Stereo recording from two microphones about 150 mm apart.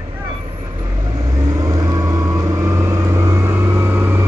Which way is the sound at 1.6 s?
25° right (ahead or behind).